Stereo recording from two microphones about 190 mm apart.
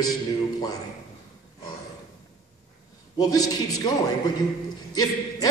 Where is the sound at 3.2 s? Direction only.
20° left (ahead or behind).